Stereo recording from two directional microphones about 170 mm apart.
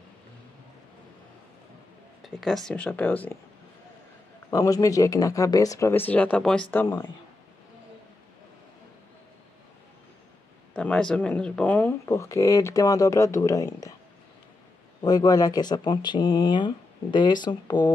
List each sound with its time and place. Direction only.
2.2 s speech: centre (ahead or behind)
4.5 s speech: 20° left (ahead or behind)
10.7 s speech: 5° left (ahead or behind)
15.0 s speech: 25° left (ahead or behind)